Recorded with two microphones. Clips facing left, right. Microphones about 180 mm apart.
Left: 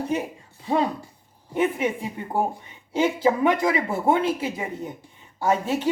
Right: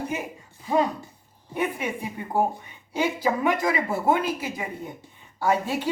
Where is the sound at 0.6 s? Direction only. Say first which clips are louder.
Even; 30° left (ahead or behind).